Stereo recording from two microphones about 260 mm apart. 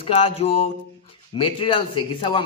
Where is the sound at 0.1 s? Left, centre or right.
Left.